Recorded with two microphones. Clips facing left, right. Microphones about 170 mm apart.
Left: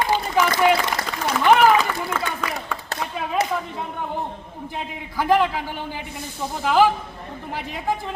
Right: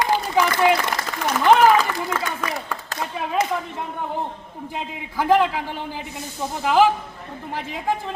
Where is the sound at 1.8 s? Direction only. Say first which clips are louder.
Right 1 dB; centre (ahead or behind).